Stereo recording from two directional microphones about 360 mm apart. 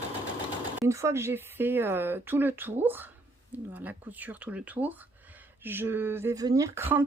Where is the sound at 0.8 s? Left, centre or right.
Centre.